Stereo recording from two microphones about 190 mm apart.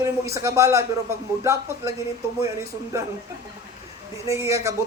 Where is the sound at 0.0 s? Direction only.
15° right (ahead or behind).